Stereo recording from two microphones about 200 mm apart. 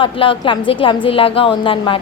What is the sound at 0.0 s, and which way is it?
A woman's voice, 25° left (ahead or behind).